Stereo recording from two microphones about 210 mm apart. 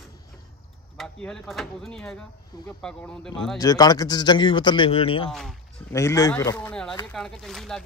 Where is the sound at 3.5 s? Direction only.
15° left (ahead or behind).